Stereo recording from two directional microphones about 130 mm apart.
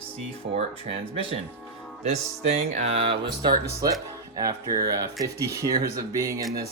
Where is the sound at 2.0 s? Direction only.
55° right (ahead or behind); by 6.4 s 25° right (ahead or behind).